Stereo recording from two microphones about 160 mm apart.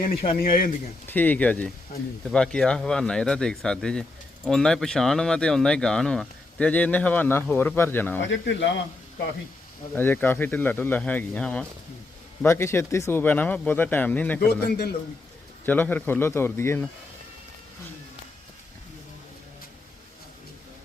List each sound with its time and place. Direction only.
0.1 s speech: 70° left (ahead or behind)
1.0 s speech: 10° left (ahead or behind)
9.9 s speech: 10° left (ahead or behind)
14.4 s a man's voice: 90° left
15.6 s speech: 10° left (ahead or behind)